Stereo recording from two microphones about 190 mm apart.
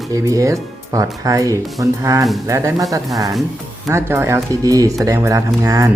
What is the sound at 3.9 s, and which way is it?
Speech, 15° right (ahead or behind).